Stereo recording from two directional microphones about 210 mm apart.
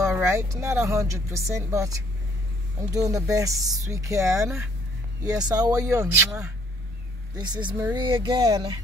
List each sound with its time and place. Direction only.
0.0 s speech: 15° right (ahead or behind)
7.3 s speech: 20° right (ahead or behind)